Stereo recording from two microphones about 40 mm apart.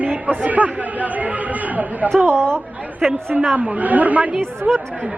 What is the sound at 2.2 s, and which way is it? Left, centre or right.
Speech, right.